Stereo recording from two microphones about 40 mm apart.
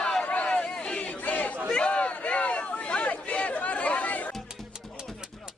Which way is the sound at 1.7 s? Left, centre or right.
Left.